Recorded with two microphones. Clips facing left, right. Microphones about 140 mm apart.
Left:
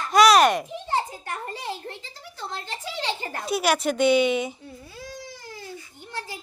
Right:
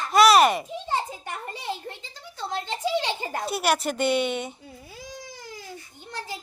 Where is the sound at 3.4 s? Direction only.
Centre (ahead or behind).